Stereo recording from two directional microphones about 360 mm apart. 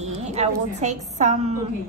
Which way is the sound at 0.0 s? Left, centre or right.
Centre.